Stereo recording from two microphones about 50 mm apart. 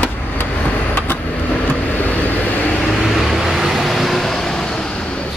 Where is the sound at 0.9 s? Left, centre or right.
Left.